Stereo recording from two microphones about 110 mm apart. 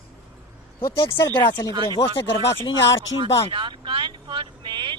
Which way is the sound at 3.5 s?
50° right (ahead or behind).